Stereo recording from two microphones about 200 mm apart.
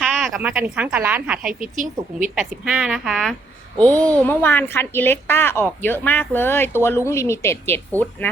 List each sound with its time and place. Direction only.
0.0 s a woman's voice: centre (ahead or behind)
1.6 s speech: 40° right (ahead or behind)
2.3 s a woman's voice: centre (ahead or behind)